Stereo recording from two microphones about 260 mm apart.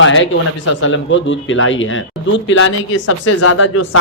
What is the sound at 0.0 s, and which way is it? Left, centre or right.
Speech, left.